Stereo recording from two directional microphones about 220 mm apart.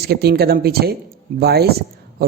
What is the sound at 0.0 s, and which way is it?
A woman's voice, 45° right (ahead or behind).